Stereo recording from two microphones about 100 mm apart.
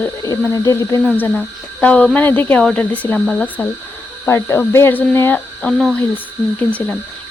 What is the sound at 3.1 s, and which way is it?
Speech, 5° left (ahead or behind).